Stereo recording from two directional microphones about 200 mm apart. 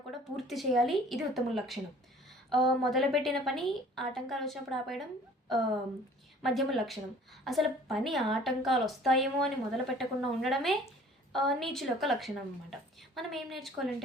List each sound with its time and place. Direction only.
0.3 s a woman's voice: centre (ahead or behind)
6.4 s a woman's voice: centre (ahead or behind)